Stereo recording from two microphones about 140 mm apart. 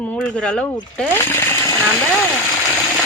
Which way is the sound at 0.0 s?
10° left (ahead or behind).